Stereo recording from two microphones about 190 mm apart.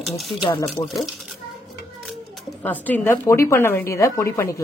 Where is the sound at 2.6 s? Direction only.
10° left (ahead or behind).